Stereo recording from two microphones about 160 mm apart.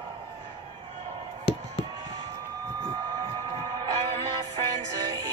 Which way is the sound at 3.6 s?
25° right (ahead or behind).